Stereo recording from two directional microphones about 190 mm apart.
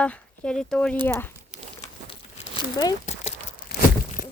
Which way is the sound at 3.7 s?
55° left (ahead or behind).